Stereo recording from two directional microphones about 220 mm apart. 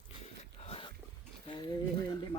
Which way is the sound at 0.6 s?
25° left (ahead or behind).